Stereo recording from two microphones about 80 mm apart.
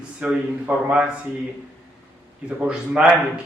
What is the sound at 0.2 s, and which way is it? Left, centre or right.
Speech, centre.